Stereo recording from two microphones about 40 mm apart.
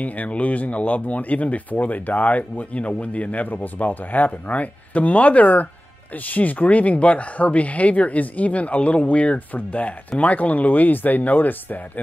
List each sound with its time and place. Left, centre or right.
0.0 s speech: left